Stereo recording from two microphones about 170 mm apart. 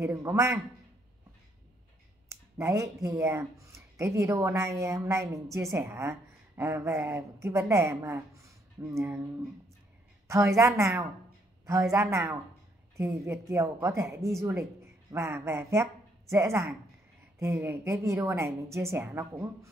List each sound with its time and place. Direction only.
0.0 s speech: 15° right (ahead or behind)
2.5 s speech: 15° right (ahead or behind)
10.2 s speech: 15° right (ahead or behind)